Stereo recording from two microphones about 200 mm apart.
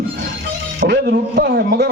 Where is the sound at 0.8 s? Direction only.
55° right (ahead or behind).